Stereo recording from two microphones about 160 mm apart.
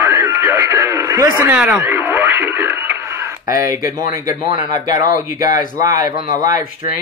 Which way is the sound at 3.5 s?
60° left (ahead or behind).